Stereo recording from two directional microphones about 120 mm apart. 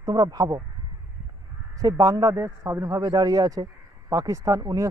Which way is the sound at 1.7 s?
30° right (ahead or behind).